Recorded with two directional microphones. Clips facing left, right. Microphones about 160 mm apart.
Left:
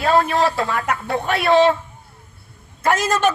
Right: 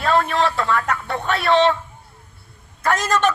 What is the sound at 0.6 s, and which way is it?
Speech, 20° left (ahead or behind).